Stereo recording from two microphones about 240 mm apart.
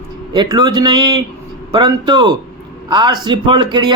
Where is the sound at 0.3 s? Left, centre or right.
Centre.